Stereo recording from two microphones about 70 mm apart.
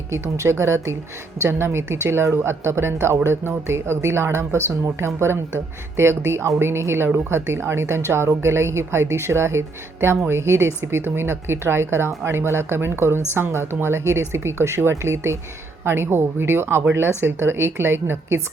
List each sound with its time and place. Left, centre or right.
0.1 s speech: right